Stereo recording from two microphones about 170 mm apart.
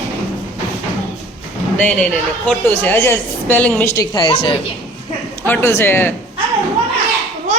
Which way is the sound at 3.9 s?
25° left (ahead or behind).